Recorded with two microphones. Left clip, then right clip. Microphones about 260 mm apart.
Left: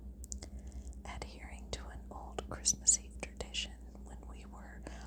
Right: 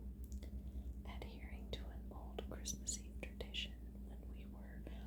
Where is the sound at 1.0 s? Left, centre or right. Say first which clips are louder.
Left 8 dB; left.